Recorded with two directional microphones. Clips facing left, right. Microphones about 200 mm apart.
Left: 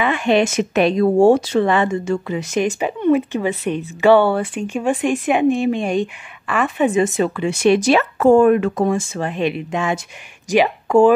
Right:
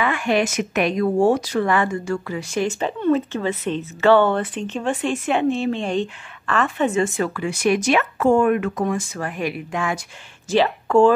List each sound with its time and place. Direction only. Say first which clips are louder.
0.0 s speech: left 4 dB; 25° left (ahead or behind)